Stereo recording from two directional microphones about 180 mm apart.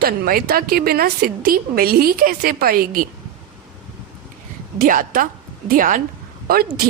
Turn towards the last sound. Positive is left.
turn(degrees=-55)  # may be behind; listen again after turning